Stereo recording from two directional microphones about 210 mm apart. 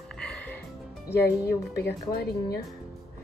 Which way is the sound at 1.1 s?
50° left (ahead or behind).